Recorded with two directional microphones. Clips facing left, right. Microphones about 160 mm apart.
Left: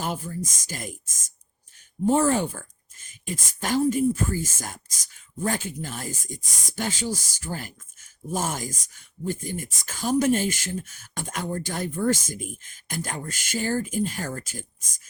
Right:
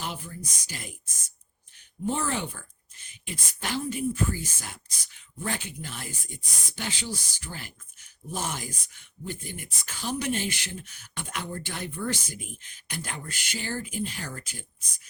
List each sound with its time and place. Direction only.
0.0 s a woman's voice: 45° left (ahead or behind)